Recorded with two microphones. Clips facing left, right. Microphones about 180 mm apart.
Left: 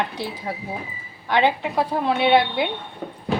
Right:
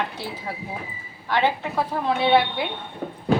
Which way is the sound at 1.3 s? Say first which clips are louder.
Left 3 dB; 15° left (ahead or behind).